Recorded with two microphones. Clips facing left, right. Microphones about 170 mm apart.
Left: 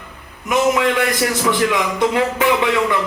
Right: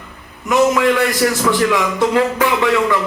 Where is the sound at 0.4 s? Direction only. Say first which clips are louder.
Right 3 dB; 20° left (ahead or behind).